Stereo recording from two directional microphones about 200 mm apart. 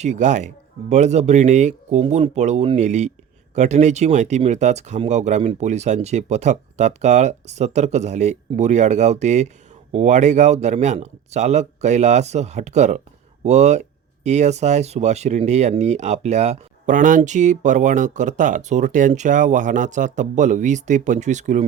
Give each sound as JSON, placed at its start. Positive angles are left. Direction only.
{"t": 0.0, "sound": "speech", "side_deg": -35}